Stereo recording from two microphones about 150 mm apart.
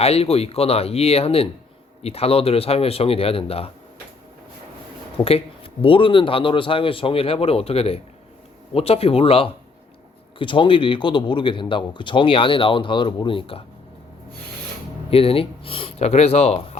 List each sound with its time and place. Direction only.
0.0 s speech: 40° left (ahead or behind)
5.1 s speech: 40° left (ahead or behind)
15.1 s speech: 40° left (ahead or behind)